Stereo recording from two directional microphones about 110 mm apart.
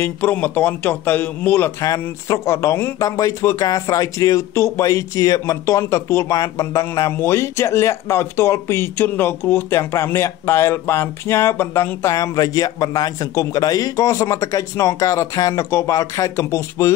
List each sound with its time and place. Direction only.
0.0 s a man's voice: 15° left (ahead or behind)
1.8 s speech: 30° left (ahead or behind)